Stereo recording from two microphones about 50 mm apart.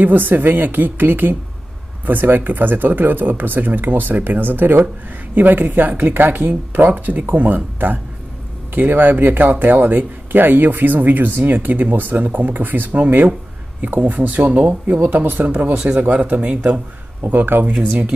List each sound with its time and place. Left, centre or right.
0.0 s speech: right
17.3 s speech: right
17.7 s speech: right